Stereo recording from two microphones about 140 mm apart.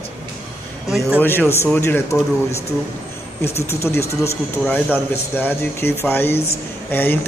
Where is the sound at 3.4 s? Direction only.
20° left (ahead or behind).